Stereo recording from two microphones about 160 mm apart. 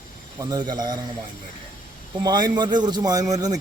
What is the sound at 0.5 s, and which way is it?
Speech, 25° right (ahead or behind).